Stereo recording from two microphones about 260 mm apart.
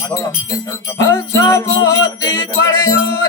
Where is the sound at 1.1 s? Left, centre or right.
Centre.